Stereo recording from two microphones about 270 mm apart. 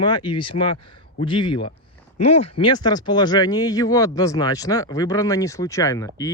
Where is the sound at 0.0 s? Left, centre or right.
Centre.